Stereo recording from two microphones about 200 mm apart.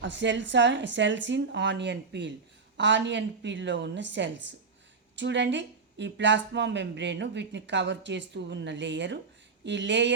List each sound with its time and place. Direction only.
0.0 s a woman's voice: 65° right (ahead or behind)